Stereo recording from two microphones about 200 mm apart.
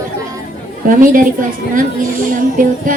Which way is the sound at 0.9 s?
40° right (ahead or behind).